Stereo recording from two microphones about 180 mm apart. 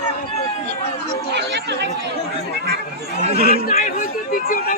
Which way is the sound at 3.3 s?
35° right (ahead or behind).